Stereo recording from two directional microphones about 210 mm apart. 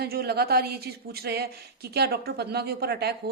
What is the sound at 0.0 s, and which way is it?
Speech, 50° right (ahead or behind).